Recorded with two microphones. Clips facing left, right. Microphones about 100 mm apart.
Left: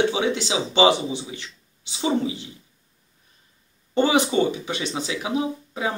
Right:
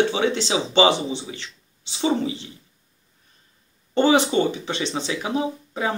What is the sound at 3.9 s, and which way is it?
Speech, 10° left (ahead or behind).